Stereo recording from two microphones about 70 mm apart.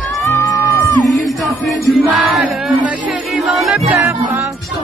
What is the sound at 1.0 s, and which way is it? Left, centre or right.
Music, centre.